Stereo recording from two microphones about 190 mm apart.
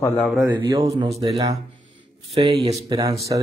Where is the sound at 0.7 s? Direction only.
25° right (ahead or behind).